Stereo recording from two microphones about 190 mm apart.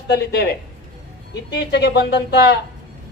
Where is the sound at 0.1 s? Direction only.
60° left (ahead or behind).